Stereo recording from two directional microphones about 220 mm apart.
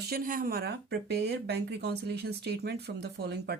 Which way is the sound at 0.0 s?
40° right (ahead or behind).